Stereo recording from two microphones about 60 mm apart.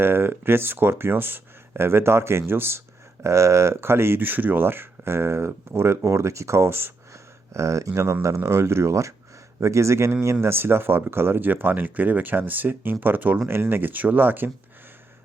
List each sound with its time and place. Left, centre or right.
0.0 s speech: right
3.2 s speech: right
7.5 s speech: right